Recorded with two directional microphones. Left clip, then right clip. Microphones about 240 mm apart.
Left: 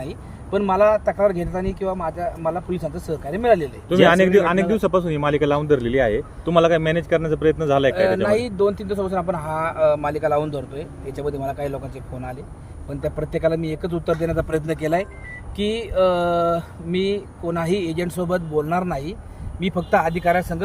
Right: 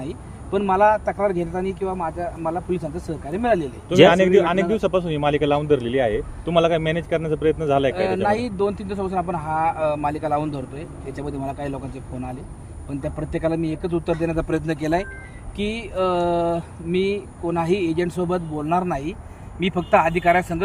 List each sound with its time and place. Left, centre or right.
0.0 s a man's voice: centre
7.9 s speech: centre
12.9 s speech: centre